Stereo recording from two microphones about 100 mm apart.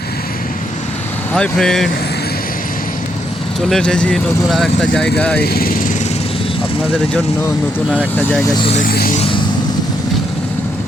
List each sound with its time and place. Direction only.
1.3 s speech: 10° left (ahead or behind)
3.7 s speech: 10° left (ahead or behind)
8.5 s speech: 65° left (ahead or behind)